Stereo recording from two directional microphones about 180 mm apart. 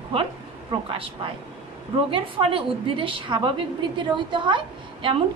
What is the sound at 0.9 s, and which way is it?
A woman's voice, 30° right (ahead or behind).